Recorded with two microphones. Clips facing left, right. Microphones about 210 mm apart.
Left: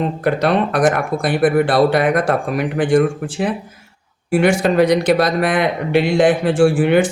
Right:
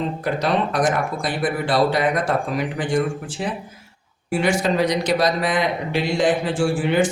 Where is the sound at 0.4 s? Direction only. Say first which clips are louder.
Left 4 dB; 60° left (ahead or behind).